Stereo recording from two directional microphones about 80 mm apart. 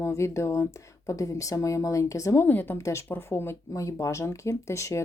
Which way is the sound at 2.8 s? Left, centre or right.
Left.